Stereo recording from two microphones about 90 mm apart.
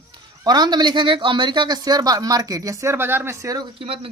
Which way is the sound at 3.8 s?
90° right.